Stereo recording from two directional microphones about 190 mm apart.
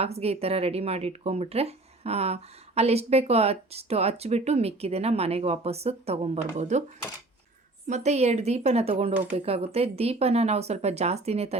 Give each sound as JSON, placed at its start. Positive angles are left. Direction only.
{"t": 0.0, "sound": "speech", "side_deg": -35}
{"t": 7.9, "sound": "speech", "side_deg": -35}